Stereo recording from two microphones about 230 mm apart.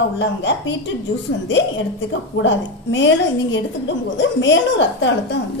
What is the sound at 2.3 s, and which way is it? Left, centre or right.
A woman's voice, left.